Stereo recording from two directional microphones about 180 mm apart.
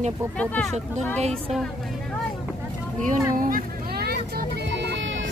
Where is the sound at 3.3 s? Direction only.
50° right (ahead or behind).